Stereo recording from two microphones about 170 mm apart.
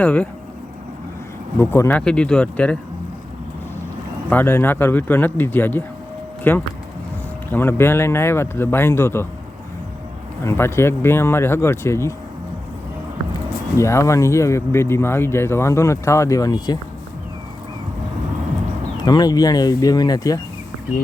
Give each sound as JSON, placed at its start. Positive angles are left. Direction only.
{"t": 0.0, "sound": "speech", "side_deg": 10}
{"t": 1.5, "sound": "speech", "side_deg": 15}
{"t": 4.3, "sound": "speech", "side_deg": 10}
{"t": 10.4, "sound": "speech", "side_deg": 15}
{"t": 13.7, "sound": "speech", "side_deg": 15}
{"t": 19.0, "sound": "speech", "side_deg": 25}